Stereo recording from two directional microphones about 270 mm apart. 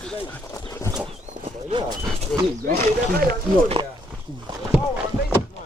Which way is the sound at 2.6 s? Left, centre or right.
Right.